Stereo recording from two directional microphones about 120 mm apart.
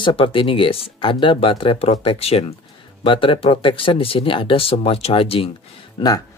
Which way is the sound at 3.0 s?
45° left (ahead or behind).